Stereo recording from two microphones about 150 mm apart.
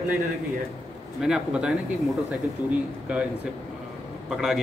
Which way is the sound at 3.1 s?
5° right (ahead or behind).